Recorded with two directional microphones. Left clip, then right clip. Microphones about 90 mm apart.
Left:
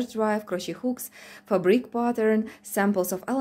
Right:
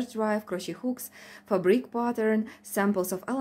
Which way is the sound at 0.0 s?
20° left (ahead or behind).